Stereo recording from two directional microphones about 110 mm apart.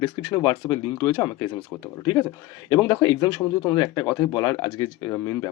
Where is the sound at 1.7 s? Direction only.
15° left (ahead or behind).